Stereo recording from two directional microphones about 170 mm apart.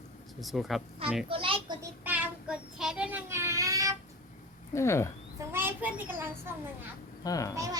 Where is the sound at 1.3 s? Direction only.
30° right (ahead or behind).